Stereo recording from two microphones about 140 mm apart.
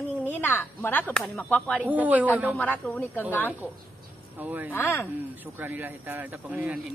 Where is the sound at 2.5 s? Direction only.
15° left (ahead or behind).